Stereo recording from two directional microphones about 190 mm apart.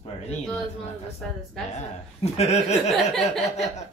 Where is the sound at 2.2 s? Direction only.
35° left (ahead or behind).